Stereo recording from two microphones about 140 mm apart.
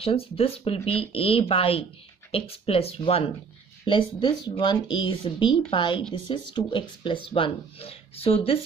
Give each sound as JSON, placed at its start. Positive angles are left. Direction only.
{"t": 0.0, "sound": "speech", "side_deg": 45}